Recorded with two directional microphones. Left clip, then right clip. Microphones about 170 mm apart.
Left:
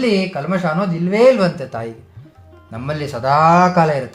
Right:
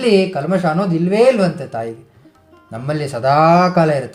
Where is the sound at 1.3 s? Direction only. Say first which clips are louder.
Even; centre (ahead or behind).